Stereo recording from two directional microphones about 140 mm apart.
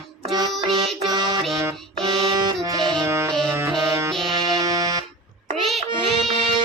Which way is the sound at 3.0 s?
20° right (ahead or behind).